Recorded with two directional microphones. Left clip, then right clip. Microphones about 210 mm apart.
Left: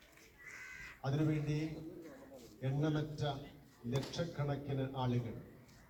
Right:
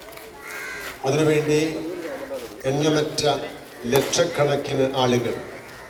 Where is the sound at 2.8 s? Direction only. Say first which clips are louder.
Right 18 dB; 55° right (ahead or behind).